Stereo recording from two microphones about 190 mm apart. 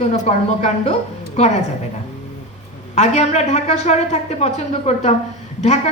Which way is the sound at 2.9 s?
35° left (ahead or behind).